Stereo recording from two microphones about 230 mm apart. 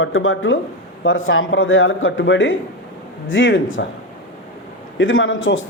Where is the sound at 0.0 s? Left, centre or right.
Left.